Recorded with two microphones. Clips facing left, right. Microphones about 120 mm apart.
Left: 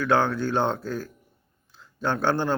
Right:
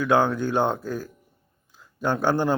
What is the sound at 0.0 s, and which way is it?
Speech, 15° right (ahead or behind).